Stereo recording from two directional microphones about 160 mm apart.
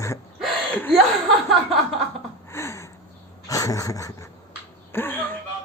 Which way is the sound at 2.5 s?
15° left (ahead or behind).